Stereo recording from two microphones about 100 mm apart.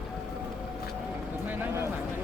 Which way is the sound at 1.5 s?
25° right (ahead or behind).